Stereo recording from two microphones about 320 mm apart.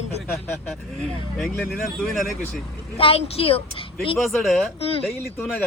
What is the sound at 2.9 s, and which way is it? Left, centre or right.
Speech, centre.